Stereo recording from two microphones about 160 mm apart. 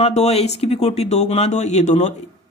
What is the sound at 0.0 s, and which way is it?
Speech, 40° left (ahead or behind).